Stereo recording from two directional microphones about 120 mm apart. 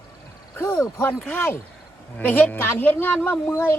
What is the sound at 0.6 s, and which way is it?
Speech, 25° left (ahead or behind).